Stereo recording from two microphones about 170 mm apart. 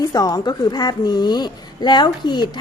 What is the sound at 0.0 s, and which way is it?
A woman's voice, 25° left (ahead or behind).